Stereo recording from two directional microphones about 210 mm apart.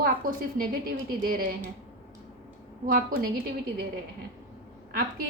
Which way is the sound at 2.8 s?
40° right (ahead or behind).